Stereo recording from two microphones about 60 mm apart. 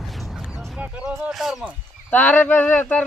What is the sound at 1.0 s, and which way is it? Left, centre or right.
Speech, centre.